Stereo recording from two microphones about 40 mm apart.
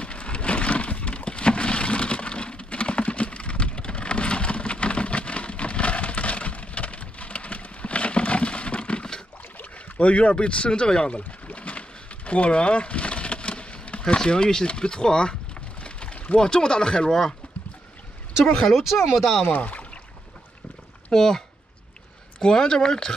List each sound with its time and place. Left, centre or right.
0.0 s a sound: left
9.6 s speech: left
12.3 s a sound: left
14.0 s speech: centre
15.8 s a sound: left
16.3 s speech: centre
18.4 s speech: centre
18.8 s speech: centre
19.4 s speech: left
21.1 s speech: centre
22.4 s speech: centre